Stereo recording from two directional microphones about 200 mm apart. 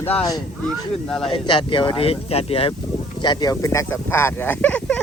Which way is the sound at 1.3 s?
25° left (ahead or behind).